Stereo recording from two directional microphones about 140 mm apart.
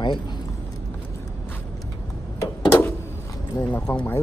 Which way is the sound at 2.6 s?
15° left (ahead or behind).